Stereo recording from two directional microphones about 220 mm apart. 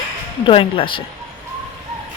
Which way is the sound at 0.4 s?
25° left (ahead or behind).